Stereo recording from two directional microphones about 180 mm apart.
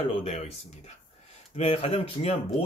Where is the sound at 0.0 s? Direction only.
30° left (ahead or behind).